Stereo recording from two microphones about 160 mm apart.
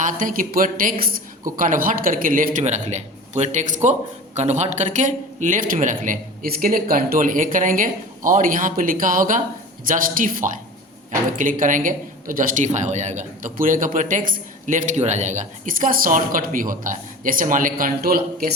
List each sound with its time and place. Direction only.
0.0 s a man's voice: 55° right (ahead or behind)